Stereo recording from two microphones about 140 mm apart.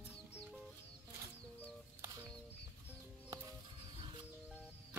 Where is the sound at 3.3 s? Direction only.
20° right (ahead or behind).